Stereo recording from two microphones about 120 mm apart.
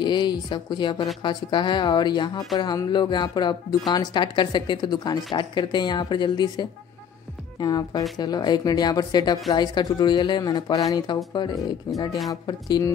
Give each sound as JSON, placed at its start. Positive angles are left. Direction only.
{"t": 0.0, "sound": "speech", "side_deg": 40}